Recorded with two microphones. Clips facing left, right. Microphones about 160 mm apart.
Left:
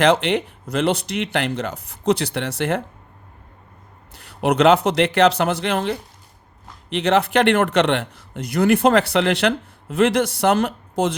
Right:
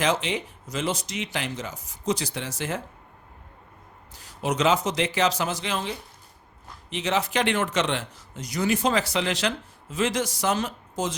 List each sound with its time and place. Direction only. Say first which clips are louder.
0.0 s speech: left 8 dB; 65° left (ahead or behind)
4.1 s speech: left 8 dB; 60° left (ahead or behind)